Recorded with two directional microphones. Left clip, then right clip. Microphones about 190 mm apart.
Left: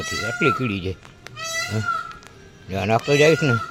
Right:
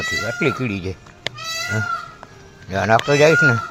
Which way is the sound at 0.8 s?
15° left (ahead or behind).